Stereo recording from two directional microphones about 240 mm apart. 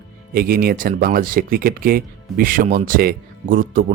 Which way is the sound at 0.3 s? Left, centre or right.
Right.